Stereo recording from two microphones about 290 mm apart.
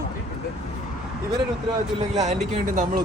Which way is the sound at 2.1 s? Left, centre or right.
Right.